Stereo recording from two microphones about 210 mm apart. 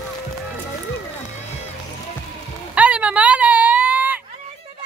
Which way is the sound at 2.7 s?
5° right (ahead or behind).